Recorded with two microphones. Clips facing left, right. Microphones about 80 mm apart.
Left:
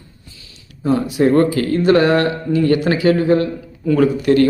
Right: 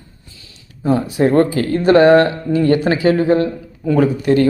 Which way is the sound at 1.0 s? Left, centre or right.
Right.